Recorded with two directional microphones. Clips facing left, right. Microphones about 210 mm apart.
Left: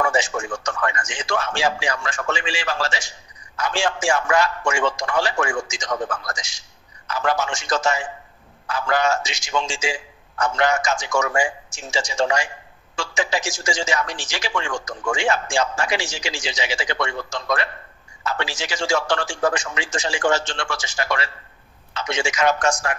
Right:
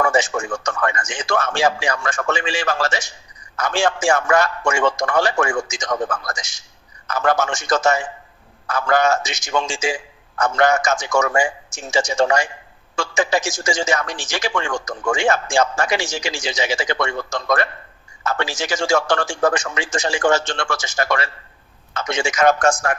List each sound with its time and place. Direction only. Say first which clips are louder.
0.0 s a man's voice: right 3 dB; 50° right (ahead or behind)